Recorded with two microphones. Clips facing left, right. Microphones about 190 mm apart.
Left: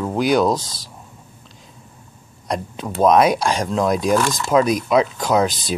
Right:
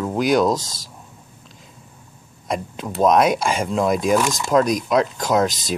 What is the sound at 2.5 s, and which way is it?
Speech, centre (ahead or behind).